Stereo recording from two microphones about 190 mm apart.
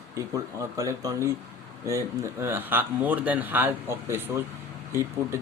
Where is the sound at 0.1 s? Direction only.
15° right (ahead or behind).